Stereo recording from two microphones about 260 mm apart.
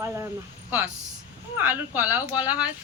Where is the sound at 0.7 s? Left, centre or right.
Centre.